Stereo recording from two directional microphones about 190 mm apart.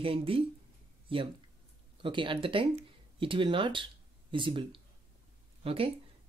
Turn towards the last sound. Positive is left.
turn(degrees=-30)  # may be behind; listen again after turning